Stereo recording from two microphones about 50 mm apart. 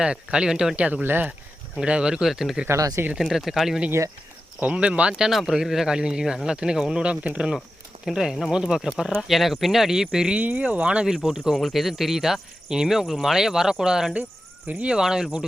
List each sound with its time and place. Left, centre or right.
0.0 s speech: centre
0.8 s speech: right
2.2 s speech: centre
2.6 s speech: right
3.2 s speech: centre
4.6 s speech: right
5.3 s speech: centre
10.6 s speech: right
11.0 s speech: centre
11.5 s speech: centre
14.7 s speech: right
14.9 s speech: centre